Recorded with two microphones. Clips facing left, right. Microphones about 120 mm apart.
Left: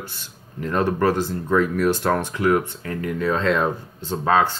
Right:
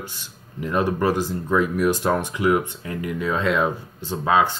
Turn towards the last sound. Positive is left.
turn(degrees=-10)  # may be behind; listen again after turning